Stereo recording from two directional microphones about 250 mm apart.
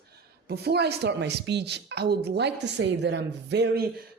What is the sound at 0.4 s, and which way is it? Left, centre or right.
A woman's voice, right.